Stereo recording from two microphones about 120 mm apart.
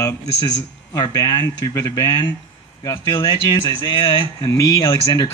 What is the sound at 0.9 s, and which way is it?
Speech, 30° left (ahead or behind).